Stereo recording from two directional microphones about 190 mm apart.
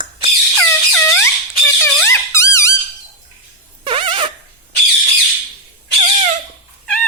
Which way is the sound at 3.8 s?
30° right (ahead or behind).